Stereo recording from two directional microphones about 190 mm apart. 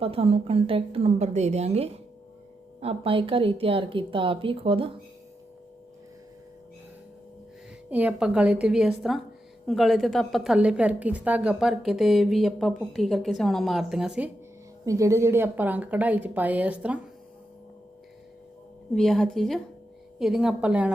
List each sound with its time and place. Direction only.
0.0 s a woman's voice: 30° right (ahead or behind)
7.9 s a woman's voice: 10° right (ahead or behind)
14.8 s a woman's voice: 15° right (ahead or behind)
18.9 s a woman's voice: 5° left (ahead or behind)